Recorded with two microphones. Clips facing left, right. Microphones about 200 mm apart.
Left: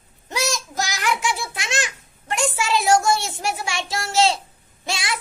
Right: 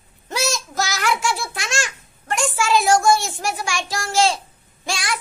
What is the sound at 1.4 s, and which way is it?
Babbling, 20° left (ahead or behind).